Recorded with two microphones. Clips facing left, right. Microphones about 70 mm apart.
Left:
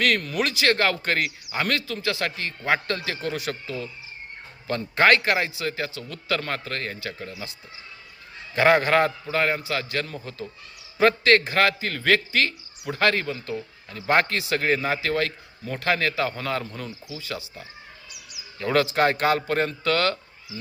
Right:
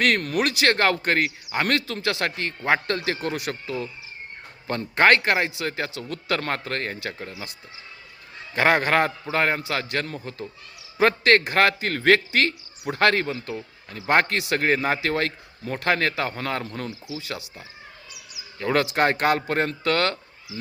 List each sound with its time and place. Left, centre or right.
0.3 s speech: right
1.7 s a man's voice: right
2.6 s speech: right
3.1 s a man's voice: right
8.5 s a man's voice: right
16.6 s speech: right
18.6 s speech: right
19.1 s a man's voice: right